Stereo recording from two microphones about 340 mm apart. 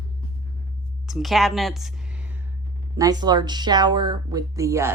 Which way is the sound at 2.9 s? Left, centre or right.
Centre.